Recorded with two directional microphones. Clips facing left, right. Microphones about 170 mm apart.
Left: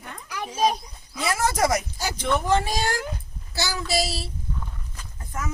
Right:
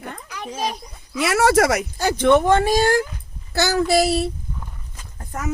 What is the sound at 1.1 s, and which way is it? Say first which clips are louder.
Speech: right 9 dB; 80° right.